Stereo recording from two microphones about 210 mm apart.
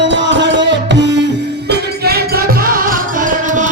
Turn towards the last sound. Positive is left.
turn(degrees=-35)  # may be behind; listen again after turning